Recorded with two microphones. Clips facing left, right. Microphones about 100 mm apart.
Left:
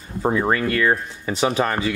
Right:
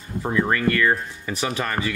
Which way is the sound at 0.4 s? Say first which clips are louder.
Right 2 dB; 20° left (ahead or behind).